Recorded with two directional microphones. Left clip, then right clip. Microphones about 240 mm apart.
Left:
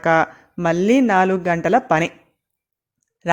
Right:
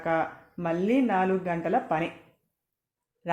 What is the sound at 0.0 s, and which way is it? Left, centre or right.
Speech, left.